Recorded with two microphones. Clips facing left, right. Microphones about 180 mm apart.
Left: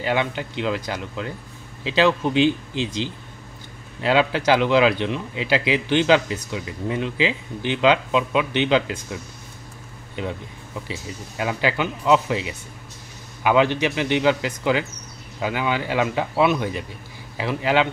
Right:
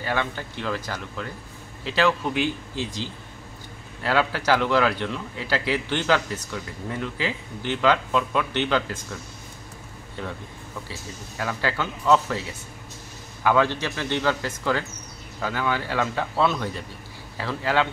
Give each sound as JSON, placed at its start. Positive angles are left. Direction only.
{"t": 0.0, "sound": "speech", "side_deg": 20}
{"t": 10.2, "sound": "speech", "side_deg": 20}